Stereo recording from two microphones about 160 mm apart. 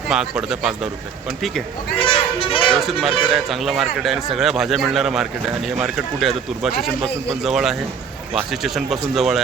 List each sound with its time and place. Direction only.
0.1 s speech: 5° right (ahead or behind)
2.0 s a sound: 35° left (ahead or behind)
2.7 s speech: centre (ahead or behind)